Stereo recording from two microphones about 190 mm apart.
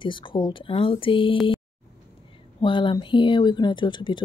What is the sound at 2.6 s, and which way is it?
Speech, 25° left (ahead or behind).